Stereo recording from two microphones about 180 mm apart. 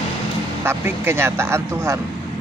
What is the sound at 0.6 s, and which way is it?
Speech, 15° right (ahead or behind).